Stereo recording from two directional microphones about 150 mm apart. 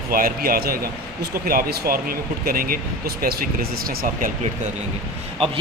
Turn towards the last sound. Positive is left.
turn(degrees=-40)  # may be behind; listen again after turning